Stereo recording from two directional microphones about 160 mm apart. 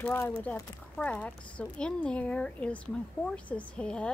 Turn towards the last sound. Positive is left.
turn(degrees=5)  # may be behind; listen again after turning